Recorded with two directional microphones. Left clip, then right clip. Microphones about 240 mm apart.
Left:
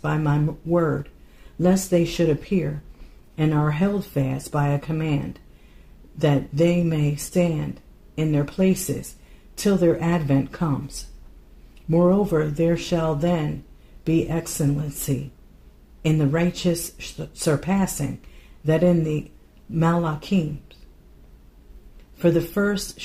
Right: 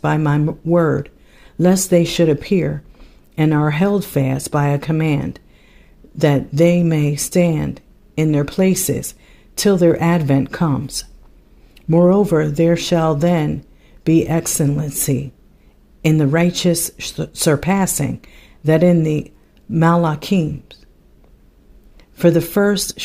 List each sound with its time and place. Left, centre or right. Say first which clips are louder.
0.0 s speech: right 7 dB; right
11.9 s speech: right 6 dB; right
22.2 s speech: right 7 dB; right